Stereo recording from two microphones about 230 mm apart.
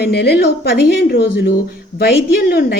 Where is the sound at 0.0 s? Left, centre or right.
Left.